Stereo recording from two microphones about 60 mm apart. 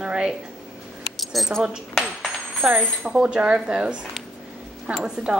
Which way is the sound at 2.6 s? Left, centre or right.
Centre.